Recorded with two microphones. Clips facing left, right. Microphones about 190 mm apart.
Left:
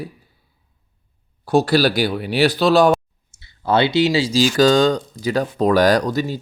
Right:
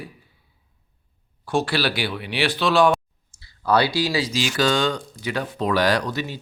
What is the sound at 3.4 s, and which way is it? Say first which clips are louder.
Speech: left 2 dB; 25° left (ahead or behind).